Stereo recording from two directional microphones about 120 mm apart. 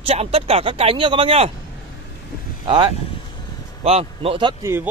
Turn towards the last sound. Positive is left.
turn(degrees=-25)  # may be behind; listen again after turning